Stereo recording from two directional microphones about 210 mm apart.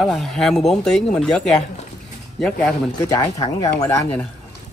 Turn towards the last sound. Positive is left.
turn(degrees=15)  # may be behind; listen again after turning